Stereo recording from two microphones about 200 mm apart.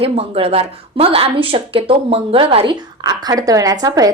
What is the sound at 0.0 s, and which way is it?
Speech, 30° right (ahead or behind).